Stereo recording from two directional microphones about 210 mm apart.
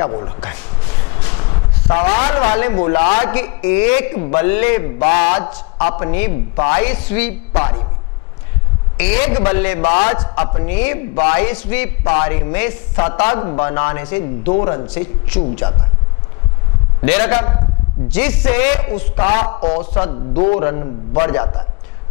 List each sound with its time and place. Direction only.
0.0 s a man's voice: 20° left (ahead or behind)
0.4 s a sound: 10° left (ahead or behind)
1.9 s a man's voice: 25° left (ahead or behind)
2.5 s a man's voice: 10° left (ahead or behind)
5.0 s a man's voice: 35° left (ahead or behind)
5.4 s a man's voice: 10° left (ahead or behind)
8.9 s a man's voice: 10° left (ahead or behind)
17.0 s a man's voice: 10° left (ahead or behind)
20.1 s a man's voice: 30° left (ahead or behind)
20.5 s a man's voice: 15° left (ahead or behind)